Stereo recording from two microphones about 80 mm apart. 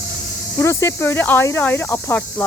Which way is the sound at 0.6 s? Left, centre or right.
Left.